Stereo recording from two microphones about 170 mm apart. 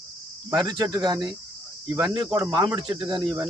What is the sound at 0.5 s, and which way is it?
Speech, 25° right (ahead or behind).